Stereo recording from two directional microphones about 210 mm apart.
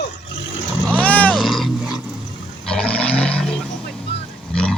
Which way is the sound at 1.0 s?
5° left (ahead or behind).